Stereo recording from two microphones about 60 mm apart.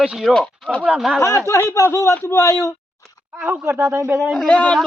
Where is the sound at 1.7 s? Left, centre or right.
Left.